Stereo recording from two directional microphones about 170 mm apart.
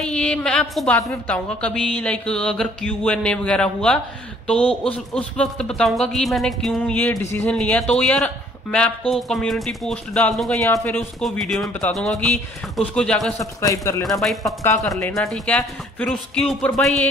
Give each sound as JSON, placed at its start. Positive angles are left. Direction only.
{"t": 0.0, "sound": "a woman's voice", "side_deg": 5}
{"t": 10.6, "sound": "speech", "side_deg": 15}
{"t": 11.0, "sound": "a woman's voice", "side_deg": 0}
{"t": 13.4, "sound": "a man's voice", "side_deg": 20}
{"t": 14.2, "sound": "a woman's voice", "side_deg": 0}